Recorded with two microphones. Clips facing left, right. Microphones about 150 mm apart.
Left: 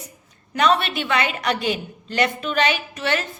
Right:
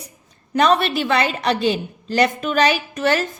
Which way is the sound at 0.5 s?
35° right (ahead or behind).